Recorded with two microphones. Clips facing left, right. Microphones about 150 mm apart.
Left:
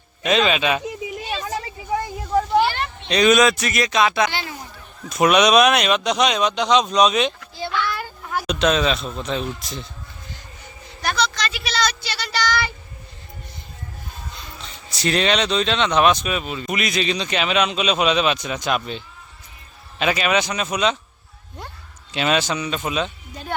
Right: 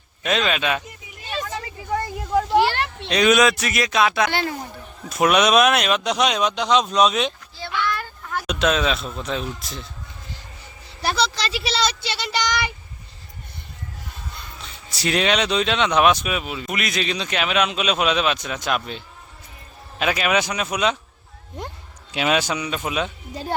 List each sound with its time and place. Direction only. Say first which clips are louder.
0.2 s speech: left 3 dB; centre (ahead or behind)
1.5 s a sound: left 2 dB; 5° left (ahead or behind)
3.1 s speech: left 1 dB; 5° right (ahead or behind)
4.3 s a sound: right 5 dB; 55° right (ahead or behind)
5.0 s speech: left 2 dB; 5° right (ahead or behind)
7.5 s child singing: left 1 dB; 15° left (ahead or behind)
8.4 s speech: left 1 dB; 5° right (ahead or behind)
11.0 s a woman's voice: even; 30° right (ahead or behind)
14.6 s speech: left 2 dB; 10° right (ahead or behind)
22.1 s speech: even; 10° right (ahead or behind)
23.3 s speech: right 2 dB; 30° right (ahead or behind)